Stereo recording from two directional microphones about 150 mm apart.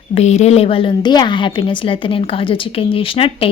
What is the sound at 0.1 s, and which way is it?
A woman's voice, 45° left (ahead or behind).